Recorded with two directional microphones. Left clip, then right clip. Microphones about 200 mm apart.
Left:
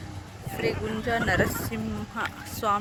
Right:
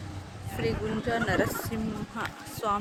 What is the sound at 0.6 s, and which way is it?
Speech, 15° right (ahead or behind).